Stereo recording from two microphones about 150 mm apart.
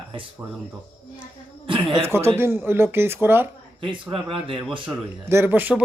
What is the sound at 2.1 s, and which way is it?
Speech, 15° right (ahead or behind).